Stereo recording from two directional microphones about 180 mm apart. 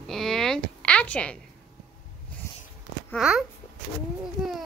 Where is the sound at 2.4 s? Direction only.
15° left (ahead or behind).